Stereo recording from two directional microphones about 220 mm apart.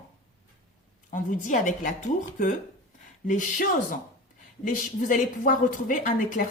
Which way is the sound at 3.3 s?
35° left (ahead or behind).